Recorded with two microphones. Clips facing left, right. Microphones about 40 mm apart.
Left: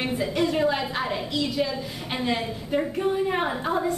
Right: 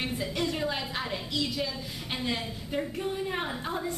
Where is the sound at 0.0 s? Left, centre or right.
Centre.